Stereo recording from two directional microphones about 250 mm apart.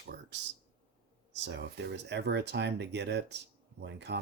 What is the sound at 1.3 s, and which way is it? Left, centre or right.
Speech, right.